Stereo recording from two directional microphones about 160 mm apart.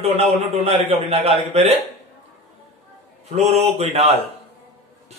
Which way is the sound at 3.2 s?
40° right (ahead or behind).